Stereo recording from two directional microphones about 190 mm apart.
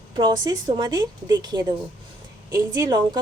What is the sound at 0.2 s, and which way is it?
A woman's voice, 25° right (ahead or behind).